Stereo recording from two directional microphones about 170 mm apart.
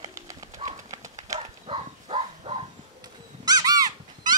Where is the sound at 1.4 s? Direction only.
35° right (ahead or behind).